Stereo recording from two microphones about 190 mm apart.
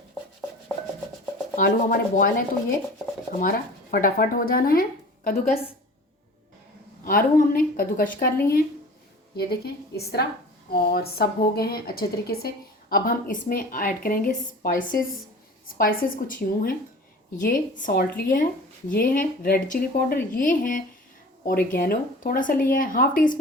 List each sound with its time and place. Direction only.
1.5 s a woman's voice: 45° left (ahead or behind)
7.0 s a woman's voice: 50° left (ahead or behind)
9.4 s a woman's voice: 55° left (ahead or behind)